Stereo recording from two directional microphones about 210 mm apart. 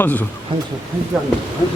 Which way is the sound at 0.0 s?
10° left (ahead or behind).